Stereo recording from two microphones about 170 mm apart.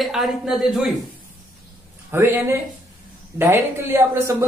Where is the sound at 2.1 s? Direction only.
15° right (ahead or behind).